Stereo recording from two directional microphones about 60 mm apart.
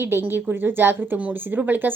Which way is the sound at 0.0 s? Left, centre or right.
Right.